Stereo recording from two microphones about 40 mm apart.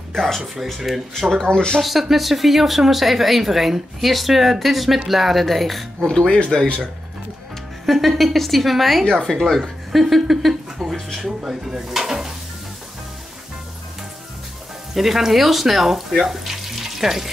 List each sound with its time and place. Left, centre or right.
0.7 s speech: centre
1.3 s speech: centre
1.8 s speech: centre
6.0 s speech: centre
7.8 s speech: centre
9.2 s speech: centre
9.9 s speech: centre
10.8 s a sound: centre
11.4 s stir: centre
15.0 s speech: centre